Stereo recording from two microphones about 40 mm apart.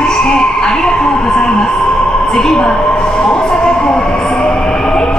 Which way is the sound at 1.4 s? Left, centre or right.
Left.